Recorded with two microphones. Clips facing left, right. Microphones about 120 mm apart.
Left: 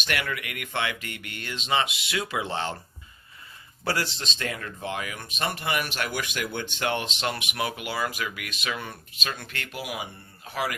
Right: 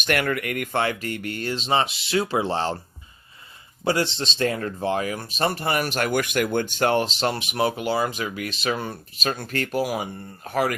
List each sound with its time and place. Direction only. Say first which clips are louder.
0.0 s speech: right 7 dB; 50° right (ahead or behind)
3.8 s speech: right 6 dB; 25° right (ahead or behind); by 10.8 s 45° right (ahead or behind)